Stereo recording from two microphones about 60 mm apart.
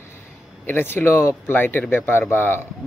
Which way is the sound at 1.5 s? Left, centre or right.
Left.